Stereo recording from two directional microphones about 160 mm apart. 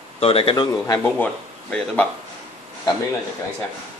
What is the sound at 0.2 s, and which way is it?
Speech, 35° left (ahead or behind).